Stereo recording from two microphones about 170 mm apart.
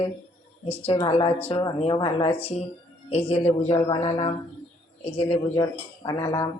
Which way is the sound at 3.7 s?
30° left (ahead or behind).